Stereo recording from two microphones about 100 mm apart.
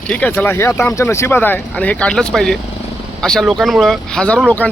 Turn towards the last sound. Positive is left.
turn(degrees=15)  # may be behind; listen again after turning